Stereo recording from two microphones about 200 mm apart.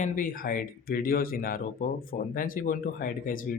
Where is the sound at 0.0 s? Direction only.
45° left (ahead or behind).